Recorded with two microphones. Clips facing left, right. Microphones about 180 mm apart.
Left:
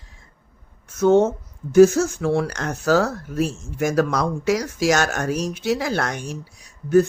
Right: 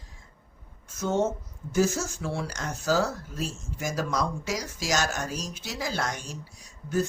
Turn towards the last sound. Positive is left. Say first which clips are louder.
# left 11 dB
turn(degrees=65)  # may be behind; listen again after turning